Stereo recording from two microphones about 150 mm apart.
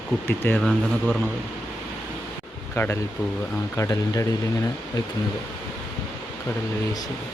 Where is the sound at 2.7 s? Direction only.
15° left (ahead or behind).